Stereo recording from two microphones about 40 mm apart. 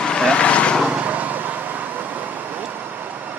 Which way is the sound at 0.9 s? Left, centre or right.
Right.